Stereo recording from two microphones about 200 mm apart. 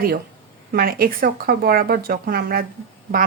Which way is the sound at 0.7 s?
45° right (ahead or behind).